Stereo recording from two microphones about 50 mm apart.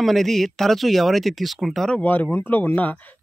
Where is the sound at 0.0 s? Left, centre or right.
Centre.